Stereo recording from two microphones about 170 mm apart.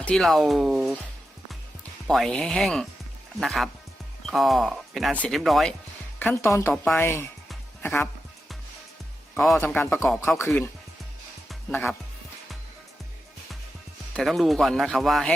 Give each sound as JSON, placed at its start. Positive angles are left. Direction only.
{"t": 0.0, "sound": "speech", "side_deg": 5}
{"t": 2.0, "sound": "speech", "side_deg": 5}
{"t": 6.1, "sound": "speech", "side_deg": 15}
{"t": 9.3, "sound": "speech", "side_deg": 0}
{"t": 9.6, "sound": "speech", "side_deg": 10}
{"t": 11.7, "sound": "speech", "side_deg": 10}
{"t": 14.1, "sound": "speech", "side_deg": 0}